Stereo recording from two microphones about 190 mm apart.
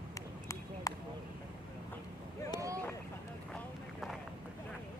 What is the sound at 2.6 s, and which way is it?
Vehicle, 15° right (ahead or behind).